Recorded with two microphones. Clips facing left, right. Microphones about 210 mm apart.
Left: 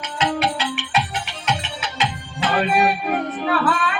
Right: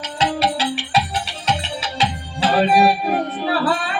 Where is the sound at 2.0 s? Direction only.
35° right (ahead or behind).